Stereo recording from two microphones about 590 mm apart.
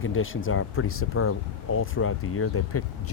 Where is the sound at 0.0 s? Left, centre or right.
Centre.